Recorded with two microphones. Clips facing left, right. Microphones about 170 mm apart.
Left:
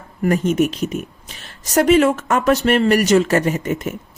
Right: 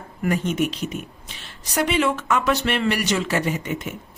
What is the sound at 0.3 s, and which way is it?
Speech, 45° left (ahead or behind).